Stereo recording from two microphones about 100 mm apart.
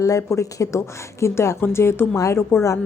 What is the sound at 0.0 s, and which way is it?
A woman's voice, 30° left (ahead or behind).